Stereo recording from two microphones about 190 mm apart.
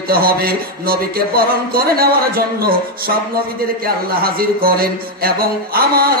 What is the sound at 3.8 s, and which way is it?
Speech, 50° right (ahead or behind).